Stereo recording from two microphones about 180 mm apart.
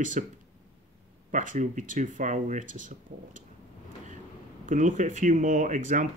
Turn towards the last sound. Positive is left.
turn(degrees=-45)  # may be behind; listen again after turning